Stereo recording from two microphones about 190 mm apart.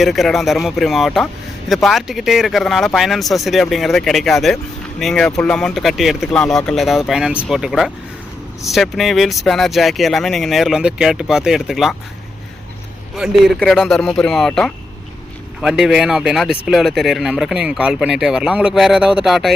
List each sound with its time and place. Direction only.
0.0 s speech: centre (ahead or behind)
13.1 s speech: centre (ahead or behind)